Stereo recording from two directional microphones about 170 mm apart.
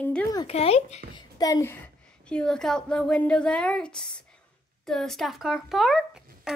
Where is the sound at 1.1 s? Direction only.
20° left (ahead or behind).